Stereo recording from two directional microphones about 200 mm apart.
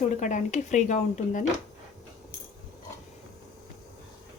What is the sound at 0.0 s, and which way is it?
A woman's voice, 40° left (ahead or behind).